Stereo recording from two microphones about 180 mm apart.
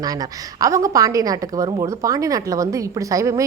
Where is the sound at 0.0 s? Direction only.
20° right (ahead or behind).